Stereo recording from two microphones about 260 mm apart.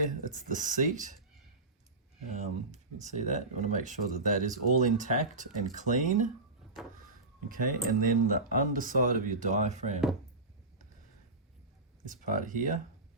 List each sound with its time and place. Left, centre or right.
0.0 s speech: right
2.7 s speech: right
7.4 s speech: right
12.0 s speech: right